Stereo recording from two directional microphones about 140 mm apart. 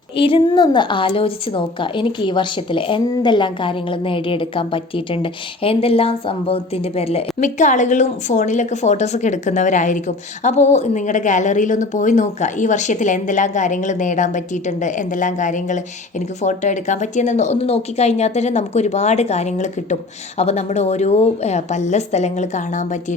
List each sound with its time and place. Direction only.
0.2 s a woman's voice: 40° left (ahead or behind); by 23.1 s 60° left (ahead or behind)